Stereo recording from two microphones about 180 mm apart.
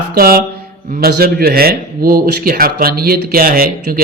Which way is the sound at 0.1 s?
55° right (ahead or behind).